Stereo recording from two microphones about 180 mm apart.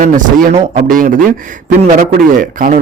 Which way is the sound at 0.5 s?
35° right (ahead or behind).